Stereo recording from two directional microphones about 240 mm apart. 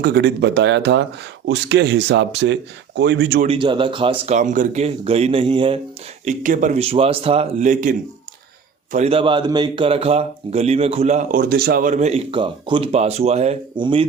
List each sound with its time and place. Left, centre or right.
0.0 s speech: right
3.4 s a man's voice: right
6.2 s a man's voice: right